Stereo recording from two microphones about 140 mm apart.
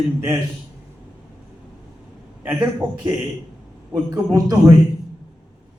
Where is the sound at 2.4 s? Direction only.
15° right (ahead or behind).